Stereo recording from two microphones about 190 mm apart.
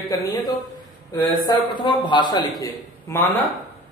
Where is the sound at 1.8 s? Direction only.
25° left (ahead or behind).